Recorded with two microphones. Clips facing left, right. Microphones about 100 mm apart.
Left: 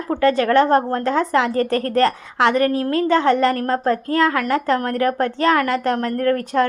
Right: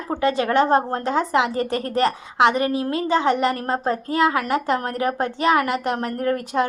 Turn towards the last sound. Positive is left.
turn(degrees=-20)  # may be behind; listen again after turning